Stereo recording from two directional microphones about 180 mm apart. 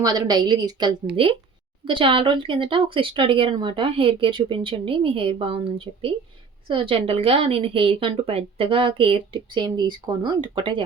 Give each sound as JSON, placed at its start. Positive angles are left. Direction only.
{"t": 0.0, "sound": "speech", "side_deg": -20}